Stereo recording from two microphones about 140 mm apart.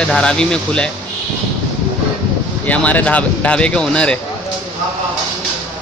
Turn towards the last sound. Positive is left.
turn(degrees=5)  # may be behind; listen again after turning